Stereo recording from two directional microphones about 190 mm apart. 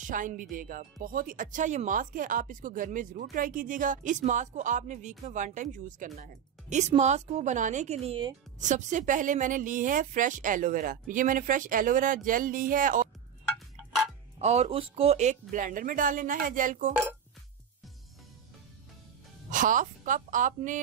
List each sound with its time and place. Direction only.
0.0 s a woman's voice: 45° right (ahead or behind); by 8.4 s 30° right (ahead or behind)
8.5 s speech: 40° right (ahead or behind)
14.4 s speech: 35° right (ahead or behind)
19.5 s speech: 45° right (ahead or behind)